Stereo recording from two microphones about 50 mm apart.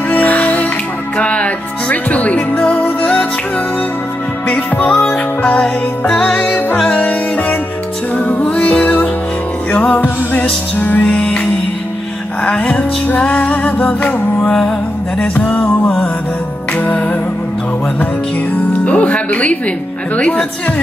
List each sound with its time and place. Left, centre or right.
0.1 s music: left
4.8 s music: centre
6.4 s music: left
10.8 s music: left
11.1 s music: left
12.4 s music: left
18.5 s music: left
20.2 s speech: left